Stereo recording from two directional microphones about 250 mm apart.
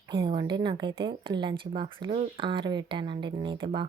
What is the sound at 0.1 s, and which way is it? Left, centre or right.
Speech, centre.